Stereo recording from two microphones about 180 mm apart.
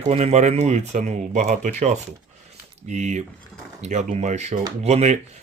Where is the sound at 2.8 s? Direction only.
40° right (ahead or behind).